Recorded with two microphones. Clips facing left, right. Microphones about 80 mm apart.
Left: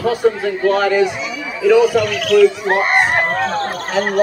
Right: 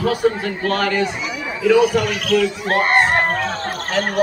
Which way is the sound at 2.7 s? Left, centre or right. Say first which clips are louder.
Left 1 dB; centre.